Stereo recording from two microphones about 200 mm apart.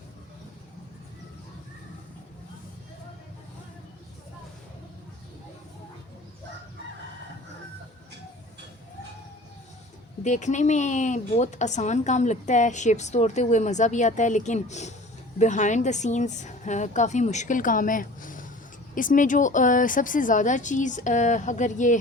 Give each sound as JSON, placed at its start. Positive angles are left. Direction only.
{"t": 10.2, "sound": "speech", "side_deg": 35}